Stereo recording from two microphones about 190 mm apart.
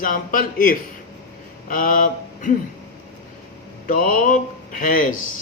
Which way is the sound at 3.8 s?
45° left (ahead or behind).